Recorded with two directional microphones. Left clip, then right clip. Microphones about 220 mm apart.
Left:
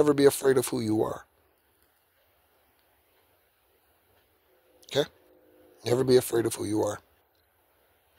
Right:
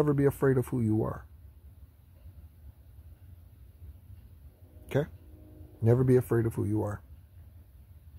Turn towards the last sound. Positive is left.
turn(degrees=40)  # may be behind; listen again after turning